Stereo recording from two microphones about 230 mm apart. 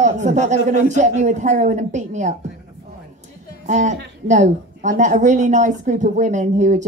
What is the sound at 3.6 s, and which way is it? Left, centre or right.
A woman's voice, right.